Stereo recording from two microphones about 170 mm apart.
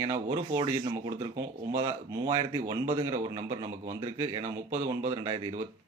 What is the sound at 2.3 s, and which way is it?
Speech, 25° right (ahead or behind).